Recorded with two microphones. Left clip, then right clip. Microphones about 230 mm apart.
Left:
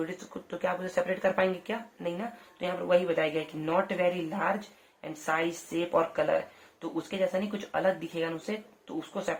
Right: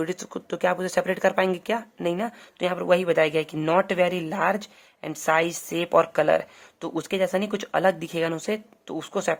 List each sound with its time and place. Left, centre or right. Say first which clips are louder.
0.0 s speech: right 7 dB; right